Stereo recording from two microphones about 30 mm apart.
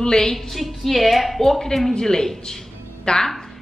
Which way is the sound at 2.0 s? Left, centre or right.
Centre.